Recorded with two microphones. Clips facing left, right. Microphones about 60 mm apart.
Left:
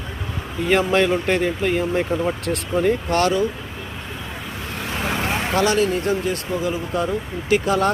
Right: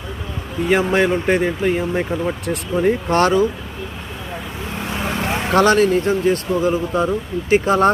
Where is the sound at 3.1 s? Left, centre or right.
Right.